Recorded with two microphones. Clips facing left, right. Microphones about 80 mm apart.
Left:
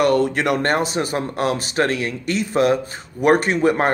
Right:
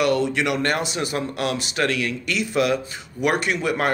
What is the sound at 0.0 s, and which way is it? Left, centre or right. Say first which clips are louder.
Speech: left 3 dB; left.